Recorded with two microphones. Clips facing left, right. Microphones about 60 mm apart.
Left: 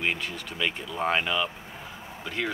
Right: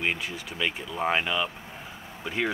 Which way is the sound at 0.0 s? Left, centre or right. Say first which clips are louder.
Even; centre.